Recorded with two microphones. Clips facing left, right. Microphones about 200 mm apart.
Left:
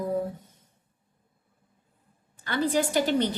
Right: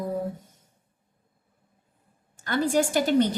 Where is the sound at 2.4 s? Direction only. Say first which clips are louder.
Right 2 dB; 45° right (ahead or behind).